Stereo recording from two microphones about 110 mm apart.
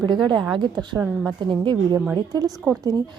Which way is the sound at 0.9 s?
15° right (ahead or behind).